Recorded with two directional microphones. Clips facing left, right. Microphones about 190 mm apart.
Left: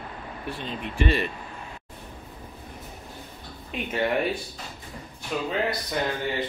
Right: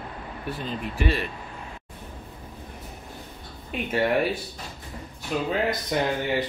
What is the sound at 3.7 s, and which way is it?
Speech, centre (ahead or behind).